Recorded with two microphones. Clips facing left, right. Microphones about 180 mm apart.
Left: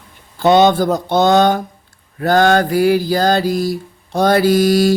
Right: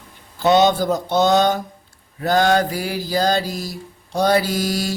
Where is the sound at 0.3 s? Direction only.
55° left (ahead or behind).